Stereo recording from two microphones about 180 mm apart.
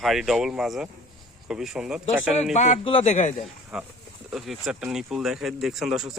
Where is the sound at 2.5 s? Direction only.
40° left (ahead or behind).